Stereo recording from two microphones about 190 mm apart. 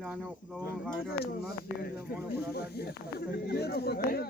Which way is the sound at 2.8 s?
55° left (ahead or behind).